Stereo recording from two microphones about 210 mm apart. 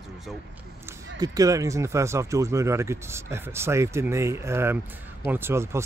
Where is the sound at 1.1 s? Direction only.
20° right (ahead or behind).